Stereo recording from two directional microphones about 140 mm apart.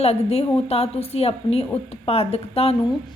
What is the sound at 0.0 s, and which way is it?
Speech, 45° left (ahead or behind).